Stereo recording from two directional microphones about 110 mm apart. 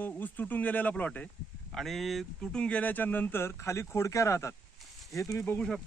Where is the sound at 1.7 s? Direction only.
Centre (ahead or behind); by 5.4 s 30° left (ahead or behind).